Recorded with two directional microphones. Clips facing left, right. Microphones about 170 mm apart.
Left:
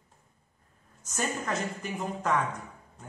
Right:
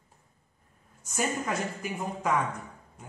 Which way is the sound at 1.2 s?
10° right (ahead or behind).